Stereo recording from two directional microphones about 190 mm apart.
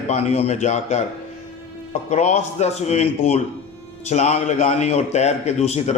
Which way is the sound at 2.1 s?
35° left (ahead or behind).